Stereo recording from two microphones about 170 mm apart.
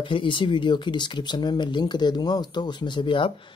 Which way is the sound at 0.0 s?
30° left (ahead or behind).